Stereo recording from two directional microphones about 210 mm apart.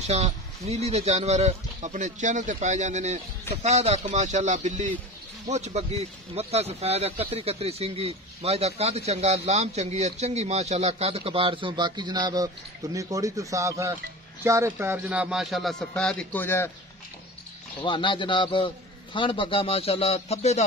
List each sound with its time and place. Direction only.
0.0 s speech: 30° right (ahead or behind); by 16.7 s 10° left (ahead or behind)
17.8 s speech: 20° left (ahead or behind)